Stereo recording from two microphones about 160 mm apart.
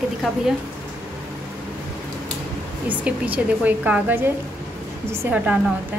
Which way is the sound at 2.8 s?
10° right (ahead or behind).